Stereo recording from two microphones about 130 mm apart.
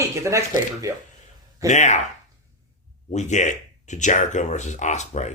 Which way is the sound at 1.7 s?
65° left (ahead or behind).